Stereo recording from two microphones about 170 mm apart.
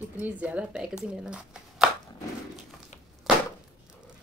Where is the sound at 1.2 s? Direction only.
5° right (ahead or behind).